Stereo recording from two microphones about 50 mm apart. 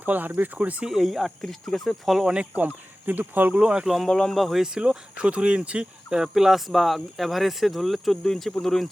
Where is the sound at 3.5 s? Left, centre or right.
Right.